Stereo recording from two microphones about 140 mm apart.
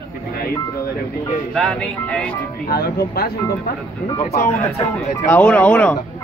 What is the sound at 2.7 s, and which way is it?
Speech, 90° left.